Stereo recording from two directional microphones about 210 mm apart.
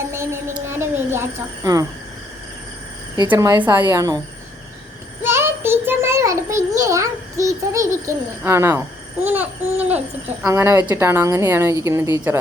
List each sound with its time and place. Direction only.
0.1 s a sound: 15° right (ahead or behind)
3.2 s a woman's voice: 15° right (ahead or behind)
5.2 s child singing: 10° right (ahead or behind)
9.2 s a woman's voice: 10° right (ahead or behind)